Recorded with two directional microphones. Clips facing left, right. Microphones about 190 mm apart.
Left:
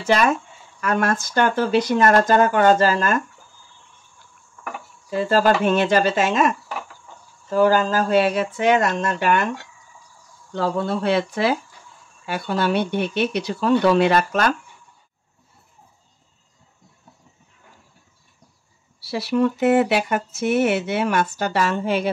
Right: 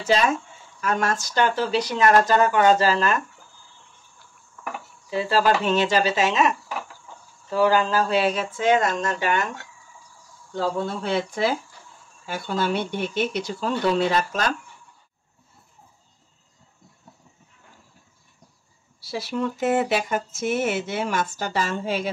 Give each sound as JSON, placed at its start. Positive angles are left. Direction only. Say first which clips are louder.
{"t": 0.0, "sound": "speech", "louder": "left 2 dB", "side_deg": 60}
{"t": 5.1, "sound": "speech", "louder": "left 3 dB", "side_deg": 50}
{"t": 7.5, "sound": "speech", "louder": "left 2 dB", "side_deg": 45}
{"t": 10.5, "sound": "speech", "louder": "left 3 dB", "side_deg": 65}
{"t": 18.9, "sound": "speech", "louder": "left 7 dB", "side_deg": 65}